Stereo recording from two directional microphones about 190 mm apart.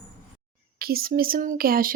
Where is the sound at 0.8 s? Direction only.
50° right (ahead or behind).